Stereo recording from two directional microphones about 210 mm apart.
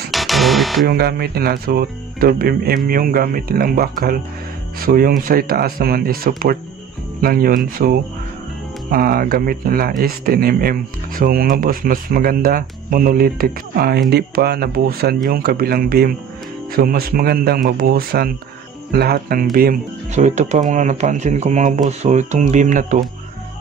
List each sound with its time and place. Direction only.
0.1 s music: centre (ahead or behind)
0.8 s speech: 50° right (ahead or behind)